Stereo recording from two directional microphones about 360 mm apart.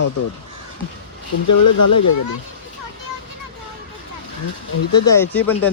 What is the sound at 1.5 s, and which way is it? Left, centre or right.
Speech, left.